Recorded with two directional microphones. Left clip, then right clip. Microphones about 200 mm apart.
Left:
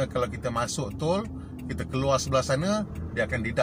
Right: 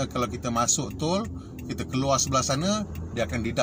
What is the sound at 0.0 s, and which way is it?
Speech, 20° right (ahead or behind).